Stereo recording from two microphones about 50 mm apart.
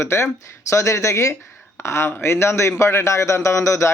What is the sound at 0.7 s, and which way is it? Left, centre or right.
Speech, left.